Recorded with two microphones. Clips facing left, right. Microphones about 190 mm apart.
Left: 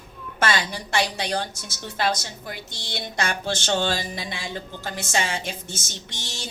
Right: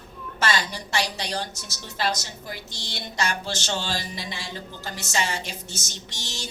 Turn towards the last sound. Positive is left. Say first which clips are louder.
# left 1 dB
turn(degrees=55)  # may be behind; listen again after turning